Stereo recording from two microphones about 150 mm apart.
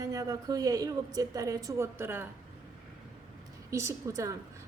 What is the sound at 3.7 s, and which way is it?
Speech, 20° right (ahead or behind).